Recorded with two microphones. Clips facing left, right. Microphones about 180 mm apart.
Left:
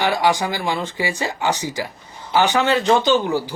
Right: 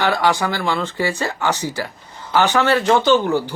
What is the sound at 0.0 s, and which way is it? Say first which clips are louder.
Speech: right 1 dB; 15° left (ahead or behind).